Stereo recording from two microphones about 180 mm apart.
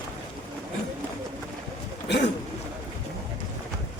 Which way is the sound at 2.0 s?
70° left (ahead or behind).